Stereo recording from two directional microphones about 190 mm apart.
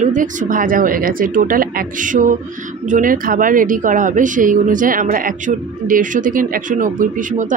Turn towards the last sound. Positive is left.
turn(degrees=-45)  # may be behind; listen again after turning